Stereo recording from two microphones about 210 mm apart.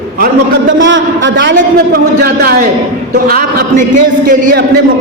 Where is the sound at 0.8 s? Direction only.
60° right (ahead or behind).